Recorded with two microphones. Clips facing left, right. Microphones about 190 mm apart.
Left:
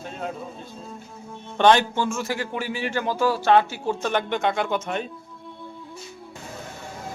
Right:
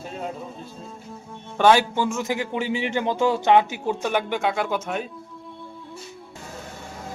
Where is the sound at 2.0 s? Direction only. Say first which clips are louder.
Right 2 dB; 20° right (ahead or behind).